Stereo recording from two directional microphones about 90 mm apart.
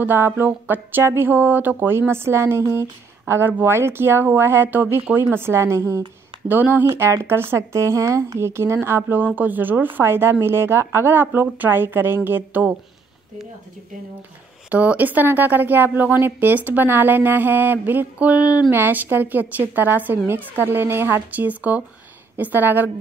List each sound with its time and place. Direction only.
0.0 s speech: 25° right (ahead or behind)
14.7 s speech: 15° right (ahead or behind)